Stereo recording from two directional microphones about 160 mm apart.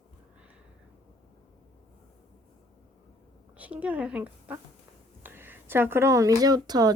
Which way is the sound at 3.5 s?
10° right (ahead or behind).